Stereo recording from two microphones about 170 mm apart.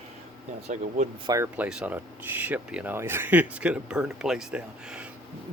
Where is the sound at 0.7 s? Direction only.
40° right (ahead or behind).